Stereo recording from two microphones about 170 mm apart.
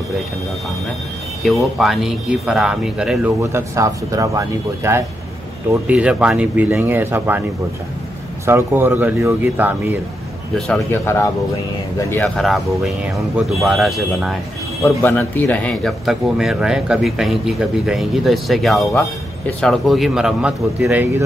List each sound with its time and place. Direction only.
1.4 s a man's voice: centre (ahead or behind)
3.5 s speech: 20° right (ahead or behind)
8.5 s speech: 15° right (ahead or behind)
10.7 s speech: 15° left (ahead or behind)
12.1 s a man's voice: 5° left (ahead or behind)
14.8 s a man's voice: 15° left (ahead or behind); by 21.1 s 10° right (ahead or behind)